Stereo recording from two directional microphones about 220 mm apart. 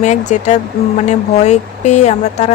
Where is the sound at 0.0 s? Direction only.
30° left (ahead or behind).